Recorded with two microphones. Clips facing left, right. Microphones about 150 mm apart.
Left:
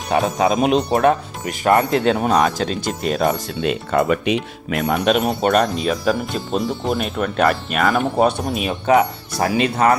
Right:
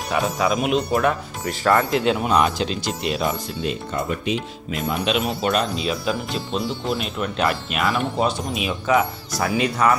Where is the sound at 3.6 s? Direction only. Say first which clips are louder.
Left 8 dB; 80° left.